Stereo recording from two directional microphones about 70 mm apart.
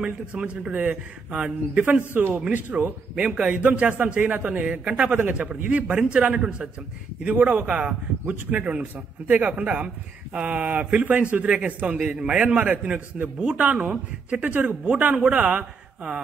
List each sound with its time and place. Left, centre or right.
0.0 s a man's voice: centre
3.2 s a man's voice: centre